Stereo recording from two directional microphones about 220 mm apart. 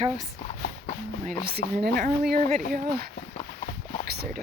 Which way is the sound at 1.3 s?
45° right (ahead or behind).